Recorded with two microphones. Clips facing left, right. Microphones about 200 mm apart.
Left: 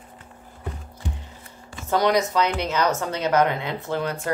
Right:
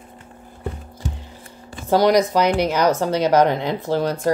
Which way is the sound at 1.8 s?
35° right (ahead or behind).